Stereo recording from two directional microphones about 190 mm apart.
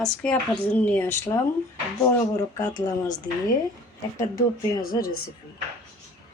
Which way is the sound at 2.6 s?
20° left (ahead or behind).